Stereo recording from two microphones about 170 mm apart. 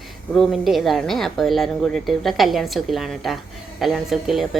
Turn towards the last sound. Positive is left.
turn(degrees=0)  # may be behind; listen again after turning